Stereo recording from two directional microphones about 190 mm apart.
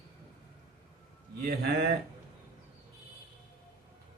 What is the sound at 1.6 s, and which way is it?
Speech, 55° right (ahead or behind).